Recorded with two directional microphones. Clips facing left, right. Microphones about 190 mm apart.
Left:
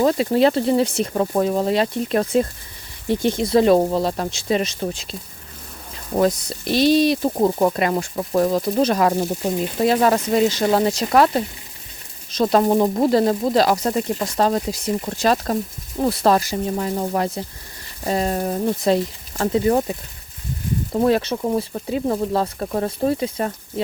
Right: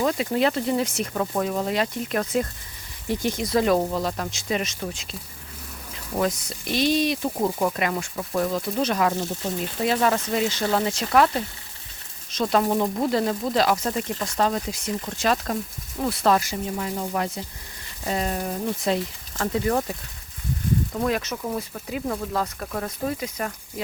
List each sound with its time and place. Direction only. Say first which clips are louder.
0.0 s speech: left 6 dB; 35° left (ahead or behind)
6.1 s speech: left 6 dB; 35° left (ahead or behind)
19.4 s speech: left 6 dB; 25° left (ahead or behind)